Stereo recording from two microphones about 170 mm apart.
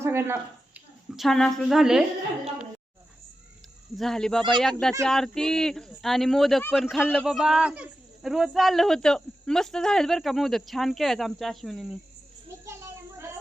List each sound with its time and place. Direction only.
0.0 s speech: 15° right (ahead or behind)
1.1 s speech: centre (ahead or behind)
3.9 s speech: centre (ahead or behind)
12.6 s a sound: 15° right (ahead or behind)